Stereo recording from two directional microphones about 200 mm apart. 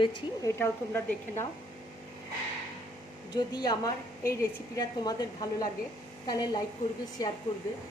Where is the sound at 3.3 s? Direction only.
20° left (ahead or behind).